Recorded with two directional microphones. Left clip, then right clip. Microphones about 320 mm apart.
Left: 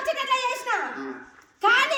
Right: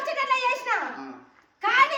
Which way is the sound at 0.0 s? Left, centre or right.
Centre.